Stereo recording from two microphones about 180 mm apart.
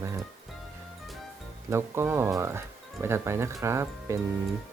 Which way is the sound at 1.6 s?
15° right (ahead or behind).